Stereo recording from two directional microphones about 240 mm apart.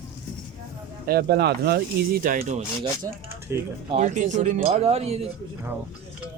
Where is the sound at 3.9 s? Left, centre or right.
Right.